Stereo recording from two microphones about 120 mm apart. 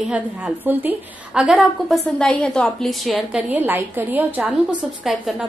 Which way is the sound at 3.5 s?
15° right (ahead or behind).